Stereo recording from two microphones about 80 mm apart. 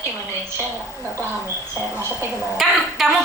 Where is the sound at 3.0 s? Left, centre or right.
Centre.